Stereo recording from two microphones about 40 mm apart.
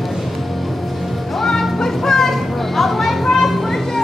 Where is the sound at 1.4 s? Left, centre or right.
Centre.